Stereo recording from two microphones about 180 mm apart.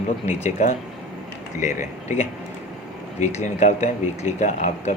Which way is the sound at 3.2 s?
40° left (ahead or behind).